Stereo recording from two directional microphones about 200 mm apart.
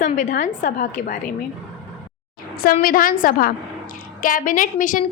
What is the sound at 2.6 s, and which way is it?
A woman's voice, 45° left (ahead or behind).